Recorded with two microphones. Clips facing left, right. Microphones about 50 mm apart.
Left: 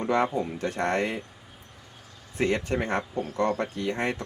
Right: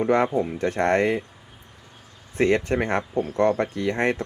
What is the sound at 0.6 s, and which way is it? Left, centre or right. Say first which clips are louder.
Speech: right 6 dB; right.